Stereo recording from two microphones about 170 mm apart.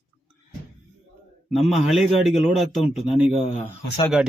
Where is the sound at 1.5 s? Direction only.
Centre (ahead or behind).